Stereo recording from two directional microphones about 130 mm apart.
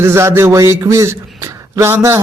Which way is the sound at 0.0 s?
20° right (ahead or behind).